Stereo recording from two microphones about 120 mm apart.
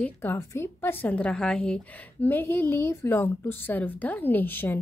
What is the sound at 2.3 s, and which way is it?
A woman's voice, 20° left (ahead or behind).